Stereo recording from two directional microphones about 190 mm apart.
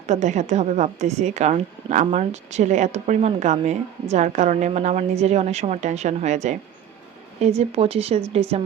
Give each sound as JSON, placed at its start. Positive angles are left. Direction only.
{"t": 0.1, "sound": "a woman's voice", "side_deg": -40}
{"t": 7.6, "sound": "a woman's voice", "side_deg": -30}